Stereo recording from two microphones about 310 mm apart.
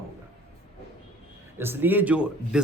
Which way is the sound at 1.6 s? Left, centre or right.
Centre.